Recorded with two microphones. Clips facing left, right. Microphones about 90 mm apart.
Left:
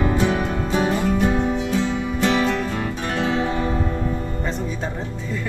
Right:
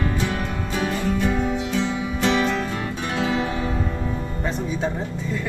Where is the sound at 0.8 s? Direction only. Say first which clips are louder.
Left 3 dB; 20° left (ahead or behind).